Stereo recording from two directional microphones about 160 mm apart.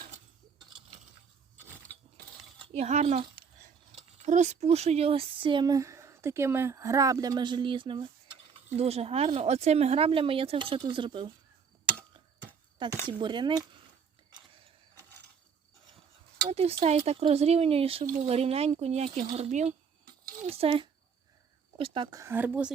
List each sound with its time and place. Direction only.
2.6 s speech: 45° right (ahead or behind)
13.1 s speech: 30° right (ahead or behind)
16.5 s speech: 40° right (ahead or behind)
22.2 s speech: 10° right (ahead or behind)